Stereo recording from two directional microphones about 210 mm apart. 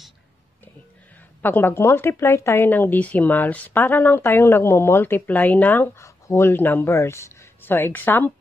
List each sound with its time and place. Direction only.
1.4 s a woman's voice: 10° left (ahead or behind)